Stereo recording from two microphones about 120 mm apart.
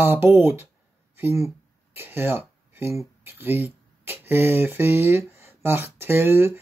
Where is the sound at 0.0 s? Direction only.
20° right (ahead or behind).